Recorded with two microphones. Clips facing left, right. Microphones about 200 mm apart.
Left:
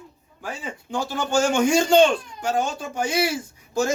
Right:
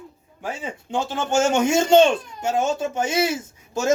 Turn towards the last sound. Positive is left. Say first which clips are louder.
# left 1 dB
turn(degrees=-25)  # may be behind; listen again after turning